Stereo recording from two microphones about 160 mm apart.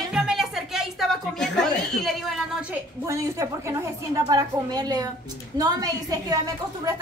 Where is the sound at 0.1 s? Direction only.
5° right (ahead or behind).